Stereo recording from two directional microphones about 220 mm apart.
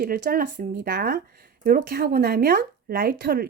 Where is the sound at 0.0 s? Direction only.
40° right (ahead or behind).